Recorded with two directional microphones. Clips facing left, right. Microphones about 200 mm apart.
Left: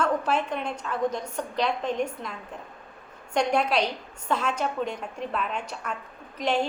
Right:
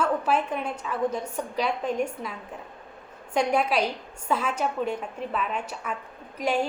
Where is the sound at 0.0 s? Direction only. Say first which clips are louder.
Right 1 dB; 5° right (ahead or behind).